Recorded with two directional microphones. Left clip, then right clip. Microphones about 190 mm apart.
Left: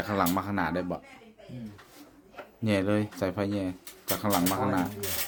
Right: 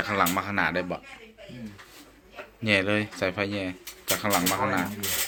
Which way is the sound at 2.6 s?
25° left (ahead or behind).